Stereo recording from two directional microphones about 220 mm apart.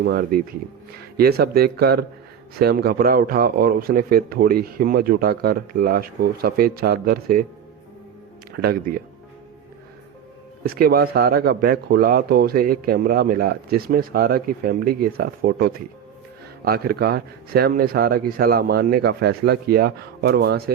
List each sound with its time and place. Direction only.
0.0 s speech: 45° right (ahead or behind)
10.6 s speech: 45° right (ahead or behind)